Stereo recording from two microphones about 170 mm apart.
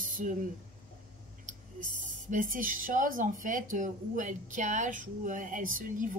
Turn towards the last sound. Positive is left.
turn(degrees=-50)  # may be behind; listen again after turning